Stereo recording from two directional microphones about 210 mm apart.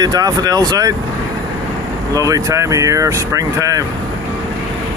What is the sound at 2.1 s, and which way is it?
Speech, 15° right (ahead or behind).